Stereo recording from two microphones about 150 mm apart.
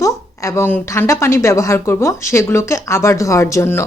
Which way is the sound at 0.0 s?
20° left (ahead or behind).